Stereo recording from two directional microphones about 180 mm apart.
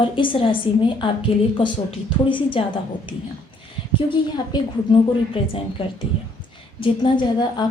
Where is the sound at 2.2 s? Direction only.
30° left (ahead or behind).